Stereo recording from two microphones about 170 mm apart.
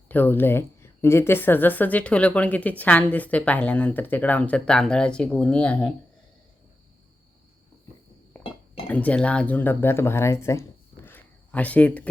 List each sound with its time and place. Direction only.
0.1 s a woman's voice: 10° left (ahead or behind)
8.9 s speech: 10° left (ahead or behind)